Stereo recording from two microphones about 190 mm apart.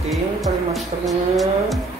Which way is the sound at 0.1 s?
Centre (ahead or behind).